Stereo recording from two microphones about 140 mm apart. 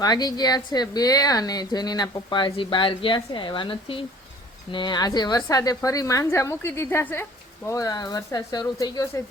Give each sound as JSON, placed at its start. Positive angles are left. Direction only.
{"t": 0.0, "sound": "a woman's voice", "side_deg": 30}